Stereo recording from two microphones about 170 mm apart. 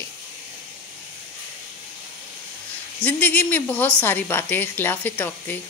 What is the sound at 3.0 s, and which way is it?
A woman's voice, 10° left (ahead or behind).